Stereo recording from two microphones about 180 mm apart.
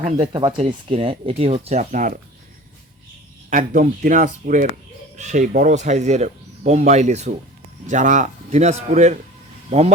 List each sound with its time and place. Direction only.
0.0 s speech: 35° right (ahead or behind)
3.5 s speech: 45° right (ahead or behind)